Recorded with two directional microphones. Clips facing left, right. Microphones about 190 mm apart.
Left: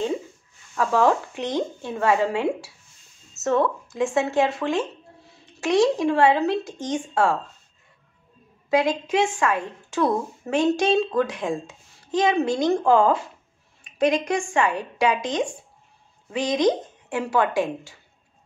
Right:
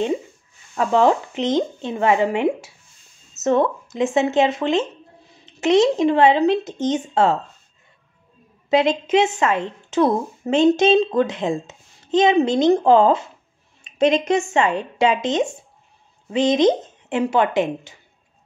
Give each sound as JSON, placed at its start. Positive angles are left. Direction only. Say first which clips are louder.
{"t": 0.7, "sound": "a woman's voice", "louder": "right 3 dB", "side_deg": -20}
{"t": 8.6, "sound": "a woman's voice", "louder": "right 3 dB", "side_deg": -20}